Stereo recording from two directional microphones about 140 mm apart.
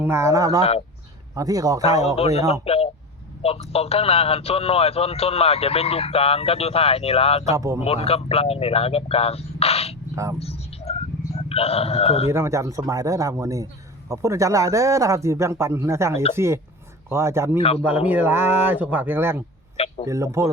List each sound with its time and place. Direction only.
0.0 s a man's voice: 20° right (ahead or behind)
2.1 s a man's voice: 45° left (ahead or behind)
7.5 s a man's voice: 20° right (ahead or behind)
7.9 s speech: 45° left (ahead or behind)
10.2 s a man's voice: 25° right (ahead or behind)
10.4 s a sound: 45° left (ahead or behind)
11.4 s speech: 45° left (ahead or behind)
12.3 s a man's voice: 20° right (ahead or behind)
17.6 s speech: 45° left (ahead or behind)
18.1 s speech: 15° right (ahead or behind)
19.7 s a sound: 45° left (ahead or behind)
20.1 s a man's voice: 20° right (ahead or behind)